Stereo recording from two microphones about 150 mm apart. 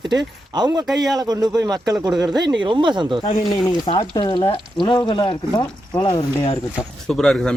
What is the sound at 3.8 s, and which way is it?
Speech, 35° left (ahead or behind).